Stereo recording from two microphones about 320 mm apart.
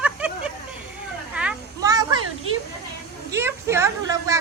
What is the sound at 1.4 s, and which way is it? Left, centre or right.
Children playing, centre.